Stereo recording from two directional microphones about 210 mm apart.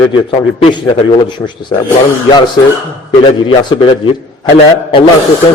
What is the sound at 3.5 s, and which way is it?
Speech, 20° left (ahead or behind).